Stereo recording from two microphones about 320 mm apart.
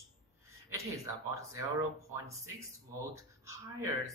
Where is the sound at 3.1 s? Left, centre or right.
Centre.